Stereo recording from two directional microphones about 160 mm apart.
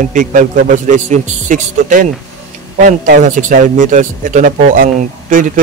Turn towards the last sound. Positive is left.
turn(degrees=-55)  # may be behind; listen again after turning